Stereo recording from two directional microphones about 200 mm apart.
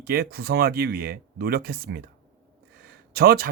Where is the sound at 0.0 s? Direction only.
50° right (ahead or behind).